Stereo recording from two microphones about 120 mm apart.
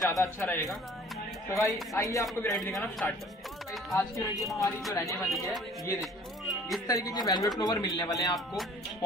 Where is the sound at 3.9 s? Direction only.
25° left (ahead or behind).